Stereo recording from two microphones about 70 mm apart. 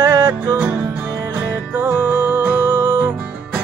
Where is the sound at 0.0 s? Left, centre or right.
Right.